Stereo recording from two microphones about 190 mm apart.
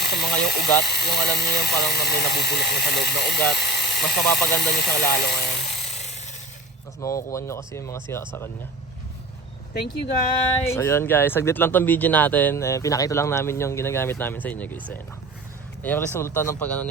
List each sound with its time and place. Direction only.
0.0 s speech: 60° left (ahead or behind)
5.6 s chainsaw: 35° left (ahead or behind)
7.0 s speech: 15° left (ahead or behind)
10.7 s speech: 15° left (ahead or behind)
15.8 s speech: 10° left (ahead or behind)